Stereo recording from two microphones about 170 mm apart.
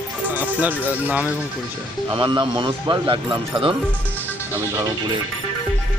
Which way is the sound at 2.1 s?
30° right (ahead or behind).